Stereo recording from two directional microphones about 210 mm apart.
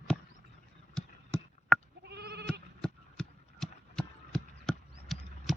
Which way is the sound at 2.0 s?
50° right (ahead or behind).